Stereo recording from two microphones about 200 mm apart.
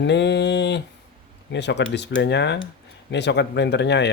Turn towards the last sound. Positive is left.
turn(degrees=60)  # may be behind; listen again after turning